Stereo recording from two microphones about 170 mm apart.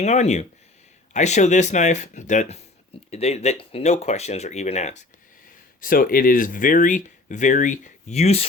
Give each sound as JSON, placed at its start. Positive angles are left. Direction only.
{"t": 0.0, "sound": "speech", "side_deg": 40}
{"t": 5.8, "sound": "speech", "side_deg": 55}